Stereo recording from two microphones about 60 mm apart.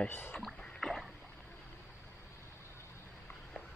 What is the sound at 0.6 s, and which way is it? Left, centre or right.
Rowboat, centre.